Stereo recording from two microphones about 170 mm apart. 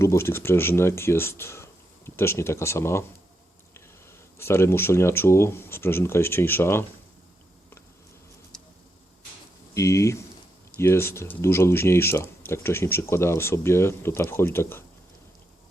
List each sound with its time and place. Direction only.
0.0 s speech: 15° left (ahead or behind)
4.4 s speech: 15° left (ahead or behind)
8.5 s a sound: 5° left (ahead or behind)
9.7 s speech: 20° left (ahead or behind)